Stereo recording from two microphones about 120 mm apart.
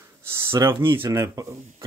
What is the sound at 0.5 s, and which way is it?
Speech, 20° right (ahead or behind).